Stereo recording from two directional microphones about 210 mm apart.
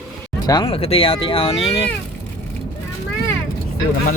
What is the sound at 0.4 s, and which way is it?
Speech, 20° left (ahead or behind).